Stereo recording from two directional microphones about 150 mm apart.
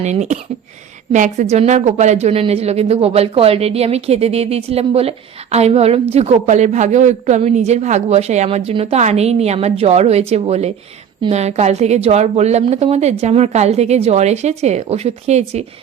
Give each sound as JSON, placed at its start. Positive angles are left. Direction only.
{"t": 0.0, "sound": "a woman's voice", "side_deg": -50}